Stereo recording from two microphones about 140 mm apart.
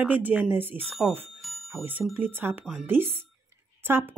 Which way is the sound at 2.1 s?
15° right (ahead or behind).